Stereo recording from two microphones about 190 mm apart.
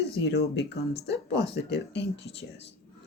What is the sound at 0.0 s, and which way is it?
Speech, 60° left (ahead or behind).